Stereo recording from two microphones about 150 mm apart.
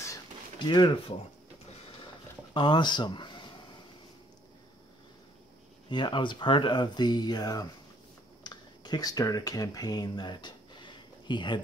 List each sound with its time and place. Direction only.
0.6 s speech: 30° left (ahead or behind)
2.5 s speech: 30° left (ahead or behind)
5.9 s speech: 30° left (ahead or behind)